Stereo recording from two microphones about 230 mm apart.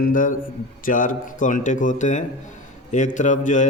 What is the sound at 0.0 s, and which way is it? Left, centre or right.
Mantra, left.